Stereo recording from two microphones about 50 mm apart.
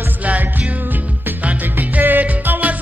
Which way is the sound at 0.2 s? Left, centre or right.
Right.